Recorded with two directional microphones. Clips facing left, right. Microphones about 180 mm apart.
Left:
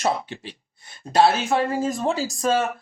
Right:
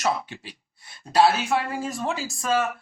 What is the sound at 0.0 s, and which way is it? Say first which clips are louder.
Speech: left 2 dB; 30° left (ahead or behind).